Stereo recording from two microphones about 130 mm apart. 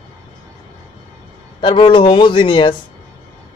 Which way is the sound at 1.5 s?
40° left (ahead or behind).